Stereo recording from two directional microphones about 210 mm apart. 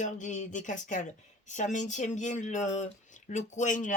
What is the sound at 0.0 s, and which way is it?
Speech, 35° left (ahead or behind).